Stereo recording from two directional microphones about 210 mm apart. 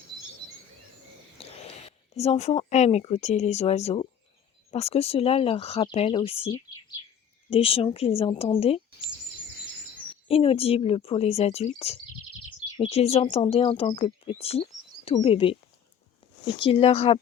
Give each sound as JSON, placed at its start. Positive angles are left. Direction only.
{"t": 1.4, "sound": "a sound", "side_deg": 30}
{"t": 2.1, "sound": "speech", "side_deg": 30}
{"t": 10.2, "sound": "speech", "side_deg": 25}
{"t": 16.6, "sound": "speech", "side_deg": 25}